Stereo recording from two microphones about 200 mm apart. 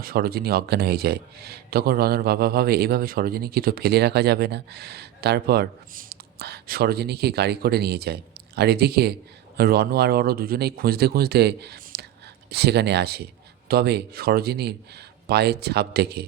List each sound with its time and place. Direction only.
0.0 s speech: 50° right (ahead or behind)